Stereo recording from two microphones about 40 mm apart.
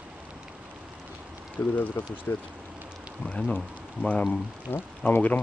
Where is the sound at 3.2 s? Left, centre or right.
Left.